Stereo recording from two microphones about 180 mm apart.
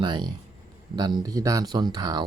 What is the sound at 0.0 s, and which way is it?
Speech, 25° right (ahead or behind).